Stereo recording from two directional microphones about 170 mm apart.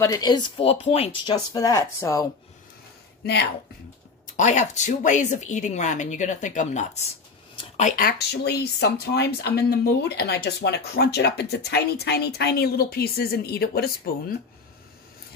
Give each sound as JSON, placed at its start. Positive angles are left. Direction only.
{"t": 0.0, "sound": "speech", "side_deg": 20}
{"t": 4.4, "sound": "speech", "side_deg": 45}